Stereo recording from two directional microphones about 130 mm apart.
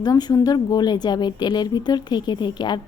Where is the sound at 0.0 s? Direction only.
30° left (ahead or behind).